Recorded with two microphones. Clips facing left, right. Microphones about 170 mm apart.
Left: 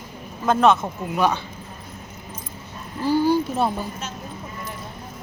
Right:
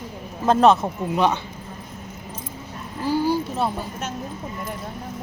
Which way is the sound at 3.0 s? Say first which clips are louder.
Left 2 dB; 10° right (ahead or behind).